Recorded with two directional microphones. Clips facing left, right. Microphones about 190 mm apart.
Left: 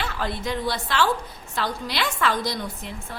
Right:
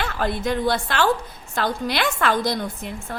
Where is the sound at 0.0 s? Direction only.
50° right (ahead or behind).